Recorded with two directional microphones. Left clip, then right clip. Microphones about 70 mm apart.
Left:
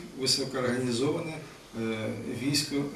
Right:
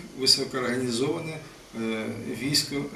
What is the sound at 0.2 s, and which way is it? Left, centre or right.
A man's voice, centre.